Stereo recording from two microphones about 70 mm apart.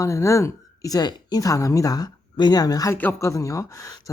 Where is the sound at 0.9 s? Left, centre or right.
Left.